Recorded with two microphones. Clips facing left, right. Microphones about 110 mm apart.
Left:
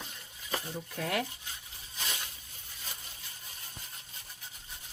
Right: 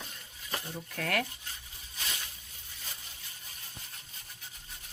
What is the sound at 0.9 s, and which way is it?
Speech, 15° left (ahead or behind).